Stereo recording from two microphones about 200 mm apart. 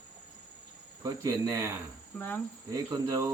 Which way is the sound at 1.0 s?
15° right (ahead or behind).